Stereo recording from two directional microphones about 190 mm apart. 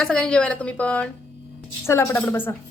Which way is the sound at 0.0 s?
5° left (ahead or behind).